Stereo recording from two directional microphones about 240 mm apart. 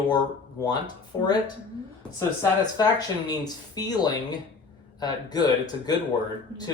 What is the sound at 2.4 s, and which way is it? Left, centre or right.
Speech, centre.